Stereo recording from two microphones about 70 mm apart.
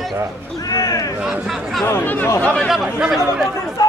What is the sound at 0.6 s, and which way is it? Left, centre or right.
Speech, left.